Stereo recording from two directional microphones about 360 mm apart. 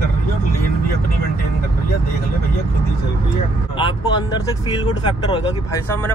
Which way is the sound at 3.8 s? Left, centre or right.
Centre.